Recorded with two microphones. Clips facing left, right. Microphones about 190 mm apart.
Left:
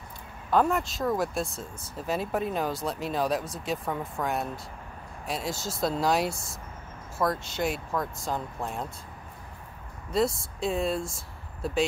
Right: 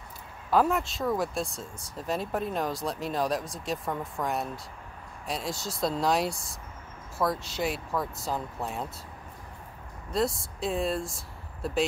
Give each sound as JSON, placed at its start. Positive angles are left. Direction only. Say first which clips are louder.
{"t": 0.5, "sound": "speech", "louder": "even", "side_deg": 0}
{"t": 10.1, "sound": "speech", "louder": "left 2 dB", "side_deg": 0}